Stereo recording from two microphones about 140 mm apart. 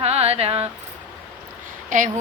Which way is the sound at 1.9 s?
70° right (ahead or behind).